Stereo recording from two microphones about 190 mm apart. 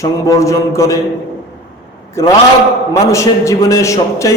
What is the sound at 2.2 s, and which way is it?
A man's voice, 15° left (ahead or behind).